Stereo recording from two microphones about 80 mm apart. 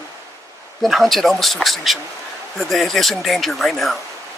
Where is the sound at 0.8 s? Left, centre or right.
Centre.